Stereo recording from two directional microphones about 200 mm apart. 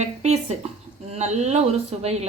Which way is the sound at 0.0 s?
35° right (ahead or behind).